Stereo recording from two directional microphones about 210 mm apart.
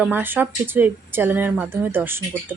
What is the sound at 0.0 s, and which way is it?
Speech, 10° right (ahead or behind).